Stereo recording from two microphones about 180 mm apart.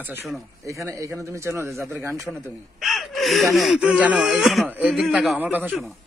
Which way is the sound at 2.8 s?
Centre (ahead or behind).